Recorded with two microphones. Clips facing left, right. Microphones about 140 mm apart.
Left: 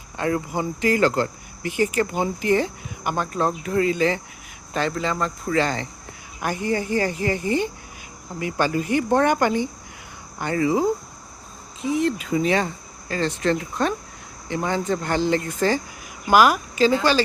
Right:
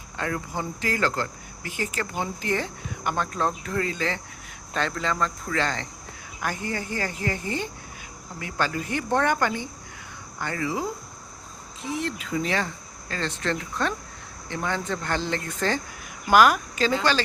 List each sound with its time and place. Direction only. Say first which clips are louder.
0.2 s speech: left 6 dB; 15° left (ahead or behind)